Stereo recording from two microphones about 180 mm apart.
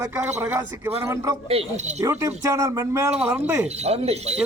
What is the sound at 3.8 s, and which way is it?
Speech, 35° right (ahead or behind).